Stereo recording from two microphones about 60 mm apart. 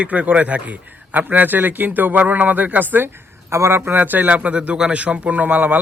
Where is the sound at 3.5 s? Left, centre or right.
Right.